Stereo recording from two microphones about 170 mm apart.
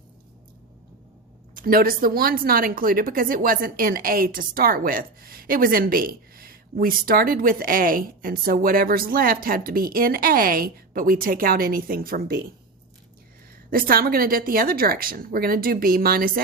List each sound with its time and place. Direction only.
1.5 s speech: 60° right (ahead or behind)
13.7 s speech: 60° right (ahead or behind)